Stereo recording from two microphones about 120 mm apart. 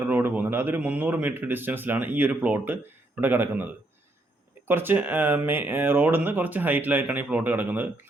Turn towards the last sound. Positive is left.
turn(degrees=-15)  # may be behind; listen again after turning